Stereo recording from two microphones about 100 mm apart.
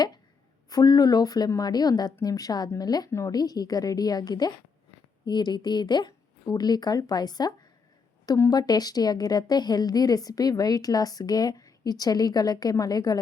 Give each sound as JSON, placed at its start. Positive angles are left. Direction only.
{"t": 0.7, "sound": "a woman's voice", "side_deg": 40}